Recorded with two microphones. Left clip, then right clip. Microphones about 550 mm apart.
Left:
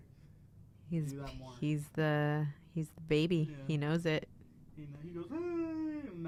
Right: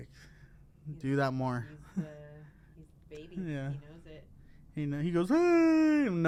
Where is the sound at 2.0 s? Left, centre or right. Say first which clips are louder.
Left 16 dB; left.